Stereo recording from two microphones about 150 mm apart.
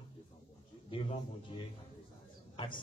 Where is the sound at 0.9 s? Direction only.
35° left (ahead or behind).